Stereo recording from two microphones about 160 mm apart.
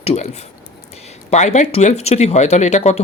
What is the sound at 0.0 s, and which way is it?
A woman's voice, 40° left (ahead or behind).